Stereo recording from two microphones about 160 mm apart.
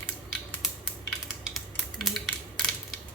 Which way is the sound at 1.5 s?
Centre (ahead or behind).